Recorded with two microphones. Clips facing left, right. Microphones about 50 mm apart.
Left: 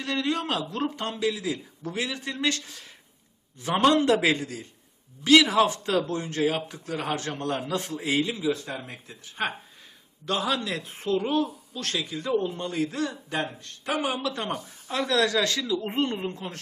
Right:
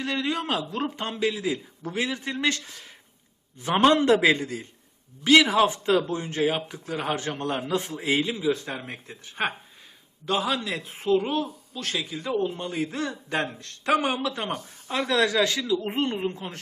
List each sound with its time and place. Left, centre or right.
0.0 s a man's voice: centre; by 9.5 s right
10.2 s a man's voice: centre
12.9 s a man's voice: right
13.6 s speech: right
14.2 s a man's voice: centre